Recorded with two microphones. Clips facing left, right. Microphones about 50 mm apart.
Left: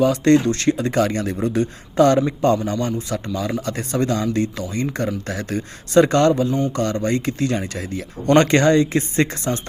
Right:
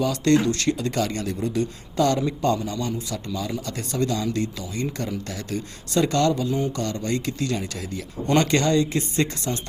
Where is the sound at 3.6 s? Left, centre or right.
Left.